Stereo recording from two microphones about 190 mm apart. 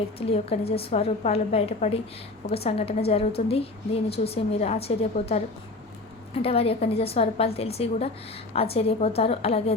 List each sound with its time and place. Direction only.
0.2 s a woman's voice: 30° left (ahead or behind)